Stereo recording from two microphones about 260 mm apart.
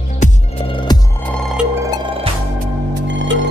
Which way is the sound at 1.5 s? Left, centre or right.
Centre.